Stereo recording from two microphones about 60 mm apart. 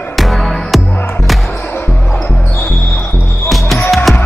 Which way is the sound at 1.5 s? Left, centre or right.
Left.